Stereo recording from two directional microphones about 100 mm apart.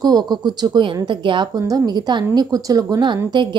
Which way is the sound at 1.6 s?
40° right (ahead or behind).